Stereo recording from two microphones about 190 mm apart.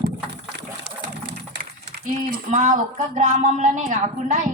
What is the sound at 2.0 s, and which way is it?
Speech, 45° right (ahead or behind).